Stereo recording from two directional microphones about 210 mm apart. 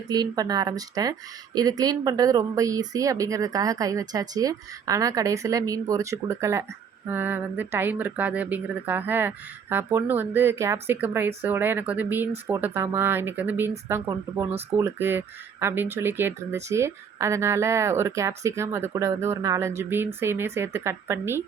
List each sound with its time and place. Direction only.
0.1 s speech: 20° right (ahead or behind)